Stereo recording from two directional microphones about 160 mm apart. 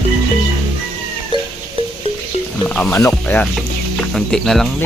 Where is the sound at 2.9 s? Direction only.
15° left (ahead or behind).